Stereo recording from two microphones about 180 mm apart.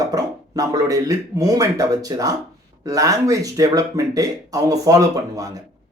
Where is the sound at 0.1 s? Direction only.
20° right (ahead or behind).